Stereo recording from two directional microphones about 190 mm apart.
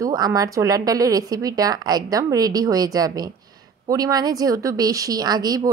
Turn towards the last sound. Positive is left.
turn(degrees=-20)  # may be behind; listen again after turning